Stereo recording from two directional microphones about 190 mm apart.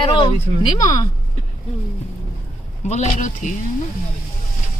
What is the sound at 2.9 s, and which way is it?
Speech, 40° left (ahead or behind).